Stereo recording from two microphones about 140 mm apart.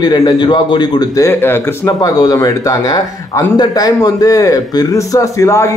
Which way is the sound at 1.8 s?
25° left (ahead or behind).